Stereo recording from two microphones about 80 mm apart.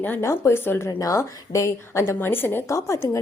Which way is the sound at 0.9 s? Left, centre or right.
Left.